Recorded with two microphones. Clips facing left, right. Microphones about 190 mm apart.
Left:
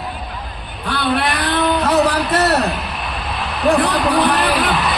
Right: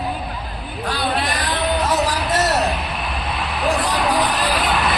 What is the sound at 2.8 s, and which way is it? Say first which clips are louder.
Music: even; centre (ahead or behind).